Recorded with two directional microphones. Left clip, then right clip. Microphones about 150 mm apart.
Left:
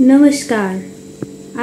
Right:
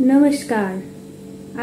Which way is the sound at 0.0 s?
55° left (ahead or behind).